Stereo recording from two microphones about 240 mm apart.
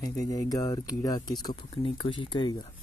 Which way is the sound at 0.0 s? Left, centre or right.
Centre.